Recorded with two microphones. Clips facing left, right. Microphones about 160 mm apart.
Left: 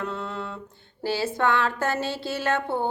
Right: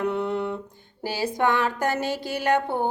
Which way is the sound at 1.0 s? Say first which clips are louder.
Even; 15° right (ahead or behind).